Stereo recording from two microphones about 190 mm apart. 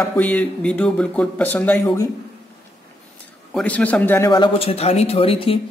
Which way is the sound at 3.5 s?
5° left (ahead or behind).